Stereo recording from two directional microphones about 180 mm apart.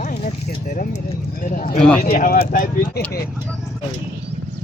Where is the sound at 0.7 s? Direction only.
45° left (ahead or behind).